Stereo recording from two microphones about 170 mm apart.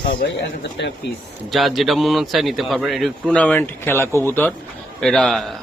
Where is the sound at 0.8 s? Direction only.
90° left.